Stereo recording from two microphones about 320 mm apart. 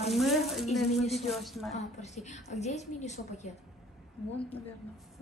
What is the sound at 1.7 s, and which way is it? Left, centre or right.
A woman's voice, left.